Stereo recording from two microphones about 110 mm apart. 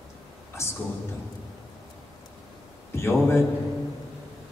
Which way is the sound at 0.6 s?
25° left (ahead or behind).